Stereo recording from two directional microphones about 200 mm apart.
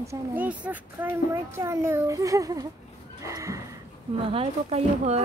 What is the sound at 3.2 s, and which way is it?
Neigh, 15° right (ahead or behind).